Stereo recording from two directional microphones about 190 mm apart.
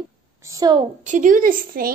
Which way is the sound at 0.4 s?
15° right (ahead or behind).